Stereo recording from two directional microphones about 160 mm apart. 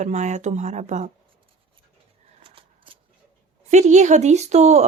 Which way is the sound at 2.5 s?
35° right (ahead or behind).